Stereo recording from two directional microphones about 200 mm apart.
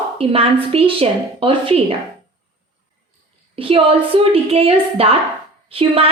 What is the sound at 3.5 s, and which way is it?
A woman's voice, 25° right (ahead or behind).